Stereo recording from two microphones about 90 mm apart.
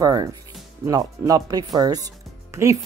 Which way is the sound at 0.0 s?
50° right (ahead or behind).